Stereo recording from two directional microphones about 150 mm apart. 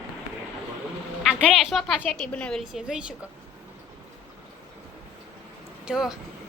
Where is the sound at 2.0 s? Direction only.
5° left (ahead or behind).